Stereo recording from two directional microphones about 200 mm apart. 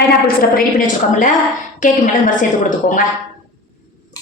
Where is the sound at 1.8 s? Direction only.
40° left (ahead or behind).